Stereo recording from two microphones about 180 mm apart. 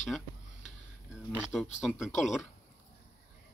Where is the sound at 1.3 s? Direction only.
Centre (ahead or behind).